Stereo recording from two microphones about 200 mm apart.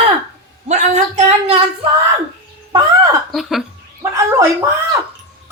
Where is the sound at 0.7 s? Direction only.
35° right (ahead or behind).